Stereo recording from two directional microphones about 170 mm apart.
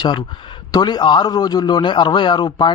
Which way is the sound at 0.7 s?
25° left (ahead or behind).